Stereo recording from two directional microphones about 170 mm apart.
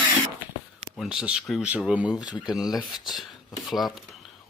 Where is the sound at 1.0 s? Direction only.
5° right (ahead or behind).